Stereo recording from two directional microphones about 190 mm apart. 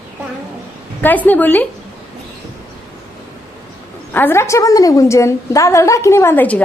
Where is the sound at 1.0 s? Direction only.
10° left (ahead or behind).